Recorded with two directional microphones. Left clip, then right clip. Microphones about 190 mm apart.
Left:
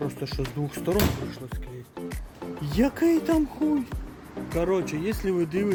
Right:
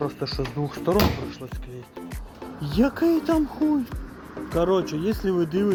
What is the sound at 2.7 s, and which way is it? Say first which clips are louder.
Speech: right 1 dB; 10° left (ahead or behind).